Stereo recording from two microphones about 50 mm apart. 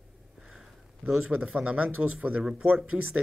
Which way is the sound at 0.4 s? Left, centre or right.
Centre.